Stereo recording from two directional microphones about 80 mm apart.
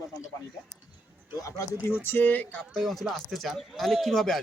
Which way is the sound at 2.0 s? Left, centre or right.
Left.